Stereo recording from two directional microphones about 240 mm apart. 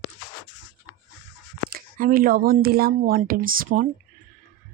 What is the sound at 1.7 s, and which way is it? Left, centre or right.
Speech, right.